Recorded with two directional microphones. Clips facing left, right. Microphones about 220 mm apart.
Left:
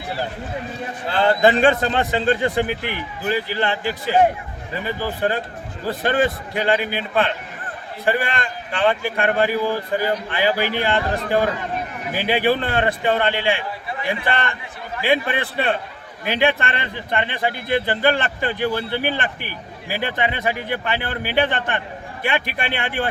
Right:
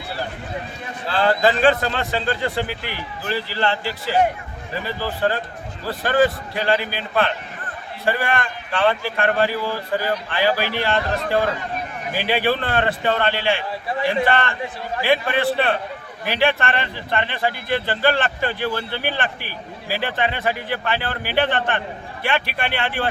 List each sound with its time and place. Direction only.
1.0 s a man's voice: 20° left (ahead or behind)